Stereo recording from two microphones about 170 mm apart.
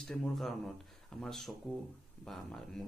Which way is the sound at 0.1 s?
5° left (ahead or behind).